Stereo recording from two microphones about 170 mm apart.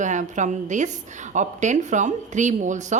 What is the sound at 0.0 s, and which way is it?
A woman's voice, 45° right (ahead or behind).